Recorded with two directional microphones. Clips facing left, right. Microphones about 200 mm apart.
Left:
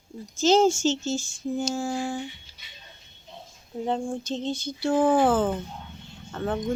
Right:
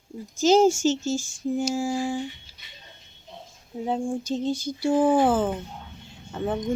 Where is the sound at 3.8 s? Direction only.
10° right (ahead or behind).